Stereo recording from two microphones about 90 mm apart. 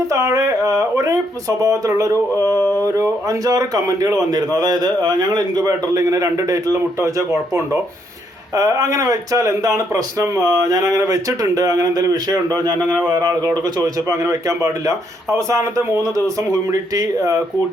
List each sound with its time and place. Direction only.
0.1 s a man's voice: 35° right (ahead or behind)